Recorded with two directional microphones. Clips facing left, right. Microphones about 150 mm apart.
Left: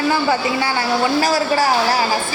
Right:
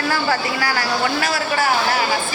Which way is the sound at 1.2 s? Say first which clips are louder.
Left 4 dB; 35° left (ahead or behind).